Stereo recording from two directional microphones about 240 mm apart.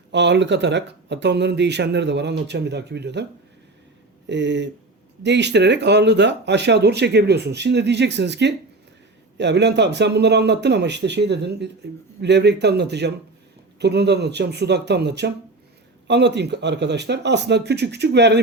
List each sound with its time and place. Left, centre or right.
0.1 s speech: right
4.3 s speech: right